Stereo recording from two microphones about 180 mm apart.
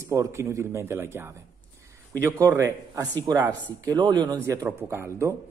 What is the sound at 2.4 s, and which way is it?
A man's voice, 15° right (ahead or behind).